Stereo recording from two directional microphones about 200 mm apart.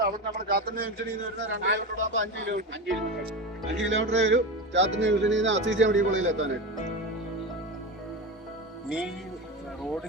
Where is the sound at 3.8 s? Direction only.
70° right (ahead or behind).